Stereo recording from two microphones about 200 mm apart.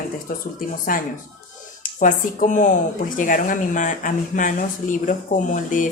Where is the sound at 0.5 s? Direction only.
45° left (ahead or behind).